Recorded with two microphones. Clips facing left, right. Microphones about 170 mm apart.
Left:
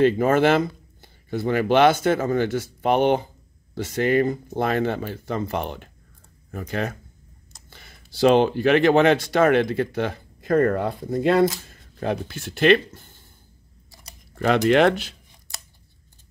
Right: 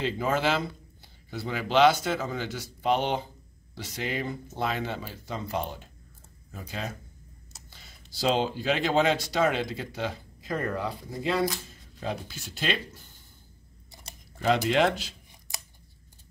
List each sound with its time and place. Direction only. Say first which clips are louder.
0.0 s speech: left 10 dB; 55° left (ahead or behind)
14.3 s a sound: left 5 dB; 65° left (ahead or behind)
14.7 s speech: left 7 dB; 60° left (ahead or behind)